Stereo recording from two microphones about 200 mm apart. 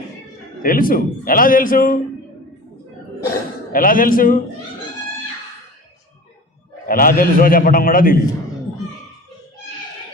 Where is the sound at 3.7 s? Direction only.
45° left (ahead or behind).